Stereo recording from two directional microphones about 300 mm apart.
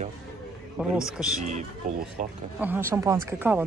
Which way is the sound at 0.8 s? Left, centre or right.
Centre.